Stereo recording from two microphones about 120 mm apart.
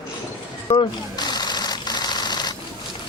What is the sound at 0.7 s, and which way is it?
Sewing machine, 35° left (ahead or behind).